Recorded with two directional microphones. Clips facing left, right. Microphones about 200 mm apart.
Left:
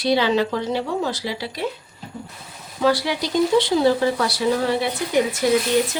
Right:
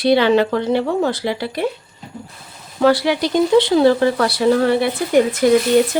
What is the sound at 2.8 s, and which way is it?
Speech, 60° right (ahead or behind).